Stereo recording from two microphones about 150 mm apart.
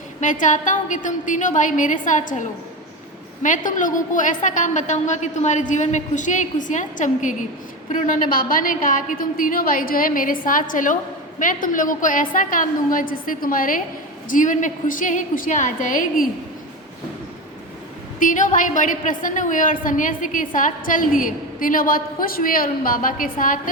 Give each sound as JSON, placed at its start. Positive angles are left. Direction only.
{"t": 0.2, "sound": "a woman's voice", "side_deg": 55}
{"t": 18.2, "sound": "a woman's voice", "side_deg": 60}